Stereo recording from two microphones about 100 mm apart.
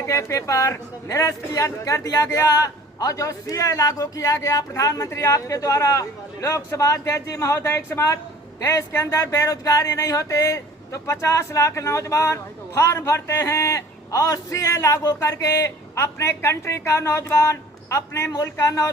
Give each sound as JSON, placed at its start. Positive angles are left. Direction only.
{"t": 0.0, "sound": "a man's voice", "side_deg": 30}